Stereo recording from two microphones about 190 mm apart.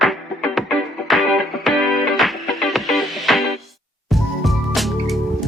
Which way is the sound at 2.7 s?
Centre (ahead or behind).